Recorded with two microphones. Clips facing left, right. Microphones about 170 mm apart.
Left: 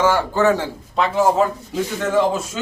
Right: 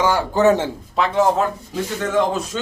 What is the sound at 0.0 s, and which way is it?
Speech, 15° right (ahead or behind).